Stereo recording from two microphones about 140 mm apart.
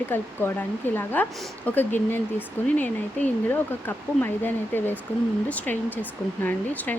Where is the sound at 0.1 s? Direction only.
15° left (ahead or behind).